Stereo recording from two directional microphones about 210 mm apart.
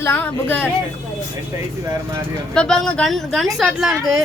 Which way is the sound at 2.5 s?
5° left (ahead or behind).